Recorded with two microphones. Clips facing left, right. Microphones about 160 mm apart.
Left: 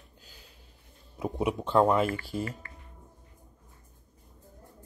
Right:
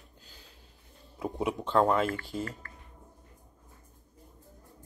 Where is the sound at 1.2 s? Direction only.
15° left (ahead or behind).